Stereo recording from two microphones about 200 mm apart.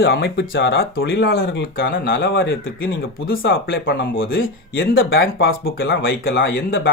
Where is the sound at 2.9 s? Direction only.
75° left (ahead or behind).